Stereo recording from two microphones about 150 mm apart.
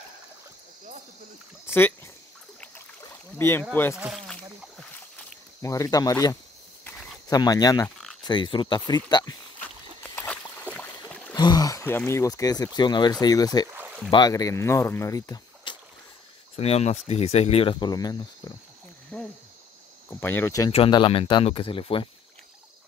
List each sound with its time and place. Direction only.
1.7 s speech: 15° left (ahead or behind)
3.3 s speech: 15° left (ahead or behind)
3.9 s a sound: centre (ahead or behind)
5.6 s speech: 20° left (ahead or behind)
10.1 s boat: 15° left (ahead or behind)
11.3 s speech: 25° left (ahead or behind)
13.7 s a sound: 5° right (ahead or behind)
14.1 s speech: 25° left (ahead or behind)
16.5 s speech: 45° left (ahead or behind); by 18.5 s 25° left (ahead or behind)
19.1 s cricket: 5° left (ahead or behind)
20.1 s speech: 15° left (ahead or behind)
20.7 s speech: 35° left (ahead or behind)